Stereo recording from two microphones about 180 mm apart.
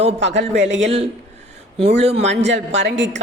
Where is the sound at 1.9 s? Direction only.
35° right (ahead or behind).